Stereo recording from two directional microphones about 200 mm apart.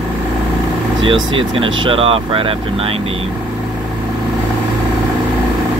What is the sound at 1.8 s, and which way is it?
Speech, 25° right (ahead or behind).